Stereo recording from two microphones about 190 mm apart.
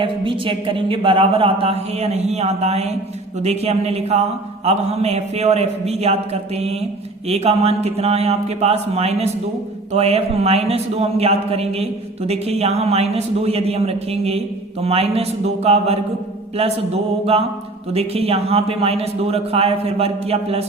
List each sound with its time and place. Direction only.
0.0 s speech: 25° right (ahead or behind)